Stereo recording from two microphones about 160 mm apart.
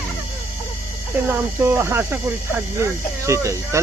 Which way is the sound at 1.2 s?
15° right (ahead or behind).